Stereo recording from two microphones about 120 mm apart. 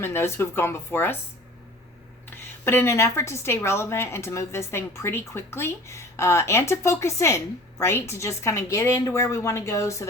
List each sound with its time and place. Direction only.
0.0 s a woman's voice: 20° left (ahead or behind)
2.3 s a woman's voice: 20° left (ahead or behind)